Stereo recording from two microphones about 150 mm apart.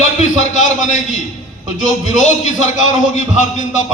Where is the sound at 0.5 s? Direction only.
55° left (ahead or behind).